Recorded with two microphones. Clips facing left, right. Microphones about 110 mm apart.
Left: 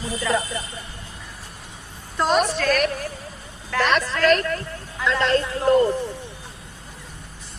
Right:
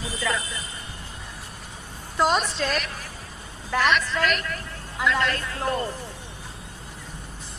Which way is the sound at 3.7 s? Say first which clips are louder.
Left 1 dB; 15° right (ahead or behind).